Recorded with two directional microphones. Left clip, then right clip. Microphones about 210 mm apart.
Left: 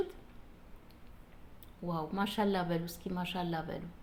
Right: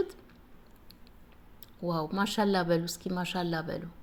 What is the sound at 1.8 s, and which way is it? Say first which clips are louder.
Speech: right 5 dB; 35° right (ahead or behind).